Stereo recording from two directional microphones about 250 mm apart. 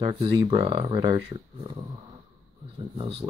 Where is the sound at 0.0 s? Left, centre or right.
Right.